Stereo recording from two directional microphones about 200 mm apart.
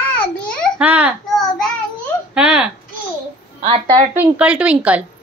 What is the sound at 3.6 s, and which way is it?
Speech, 25° right (ahead or behind).